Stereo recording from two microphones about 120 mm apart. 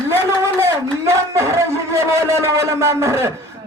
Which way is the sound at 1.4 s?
25° right (ahead or behind).